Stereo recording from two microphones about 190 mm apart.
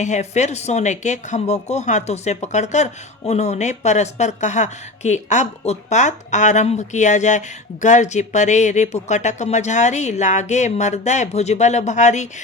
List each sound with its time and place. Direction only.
0.0 s speech: 40° left (ahead or behind)